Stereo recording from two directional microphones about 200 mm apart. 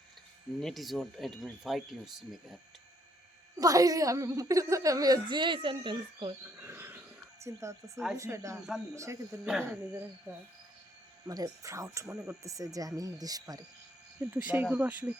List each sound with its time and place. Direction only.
0.6 s speech: centre (ahead or behind)
3.6 s a woman's voice: 15° right (ahead or behind)
6.4 s a sound: 10° right (ahead or behind)
7.4 s a woman's voice: 15° right (ahead or behind)
14.2 s a woman's voice: 5° right (ahead or behind)